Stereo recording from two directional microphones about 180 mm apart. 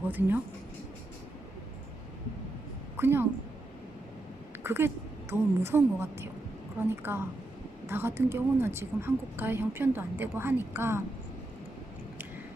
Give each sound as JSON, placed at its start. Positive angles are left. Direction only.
{"t": 0.0, "sound": "speech", "side_deg": -10}
{"t": 3.0, "sound": "a woman's voice", "side_deg": -10}
{"t": 4.6, "sound": "a woman's voice", "side_deg": -10}